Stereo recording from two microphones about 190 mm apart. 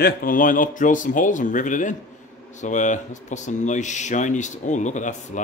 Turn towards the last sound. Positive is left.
turn(degrees=40)  # may be behind; listen again after turning